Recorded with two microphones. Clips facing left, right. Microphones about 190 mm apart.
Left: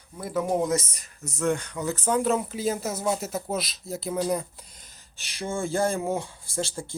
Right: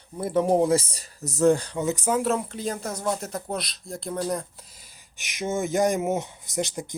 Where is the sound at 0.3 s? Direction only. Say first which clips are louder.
Right 4 dB; 30° right (ahead or behind).